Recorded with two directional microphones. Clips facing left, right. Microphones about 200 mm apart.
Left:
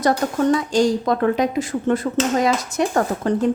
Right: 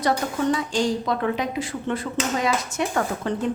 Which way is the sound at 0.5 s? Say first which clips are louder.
Left 6 dB; 45° left (ahead or behind).